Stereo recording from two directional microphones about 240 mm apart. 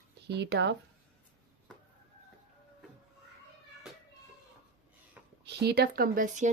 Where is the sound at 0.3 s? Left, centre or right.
Right.